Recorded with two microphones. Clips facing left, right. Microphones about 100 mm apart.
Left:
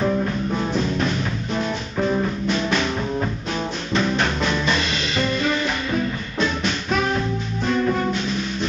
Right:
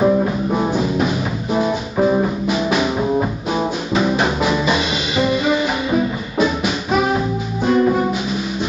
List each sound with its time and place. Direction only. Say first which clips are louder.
0.0 s music: right 6 dB; 30° right (ahead or behind)
0.6 s music: right 5 dB; 5° right (ahead or behind)